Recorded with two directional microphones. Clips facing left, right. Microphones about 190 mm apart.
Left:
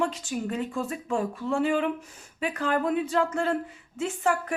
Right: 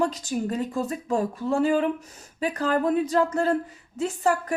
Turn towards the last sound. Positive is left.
turn(degrees=-35)  # may be behind; listen again after turning